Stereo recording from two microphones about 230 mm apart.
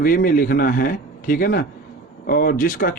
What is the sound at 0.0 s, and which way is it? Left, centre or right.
Speech, left.